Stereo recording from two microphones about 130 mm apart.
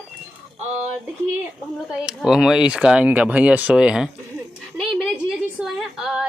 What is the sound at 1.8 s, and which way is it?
A woman's voice, 5° right (ahead or behind).